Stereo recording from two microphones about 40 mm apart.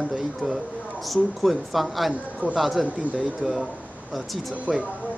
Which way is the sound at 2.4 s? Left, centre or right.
Right.